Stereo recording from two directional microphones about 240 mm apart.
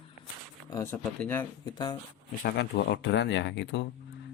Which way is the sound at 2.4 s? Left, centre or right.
Left.